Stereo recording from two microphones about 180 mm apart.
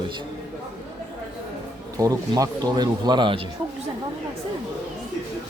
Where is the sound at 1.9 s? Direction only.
20° right (ahead or behind).